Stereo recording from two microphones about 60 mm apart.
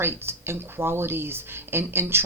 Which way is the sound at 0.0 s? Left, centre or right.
Right.